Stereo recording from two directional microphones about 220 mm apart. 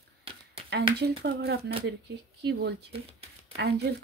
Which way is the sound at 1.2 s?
45° right (ahead or behind).